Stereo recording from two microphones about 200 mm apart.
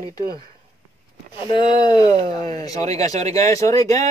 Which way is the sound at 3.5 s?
15° left (ahead or behind).